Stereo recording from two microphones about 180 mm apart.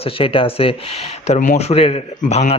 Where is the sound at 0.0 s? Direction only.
30° left (ahead or behind).